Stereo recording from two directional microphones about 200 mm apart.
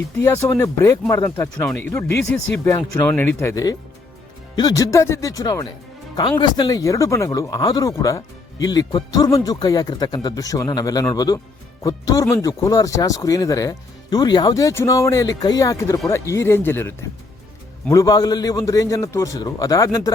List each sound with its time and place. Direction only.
0.3 s a man's voice: 15° left (ahead or behind)